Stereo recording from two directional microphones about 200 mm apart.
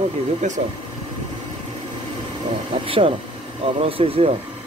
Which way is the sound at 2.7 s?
25° right (ahead or behind).